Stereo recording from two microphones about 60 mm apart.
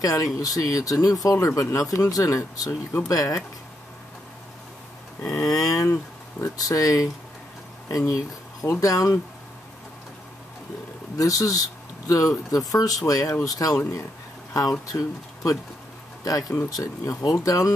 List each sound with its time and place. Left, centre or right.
0.0 s speech: left
2.0 s speech: left
5.2 s a sound: left
6.4 s speech: left
8.8 s speech: left
11.1 s speech: left